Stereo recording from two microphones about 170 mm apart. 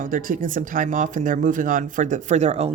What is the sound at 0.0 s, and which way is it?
Speech, 55° right (ahead or behind).